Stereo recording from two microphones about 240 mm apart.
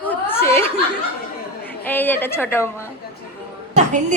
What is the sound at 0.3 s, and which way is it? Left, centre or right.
Chuckle, centre.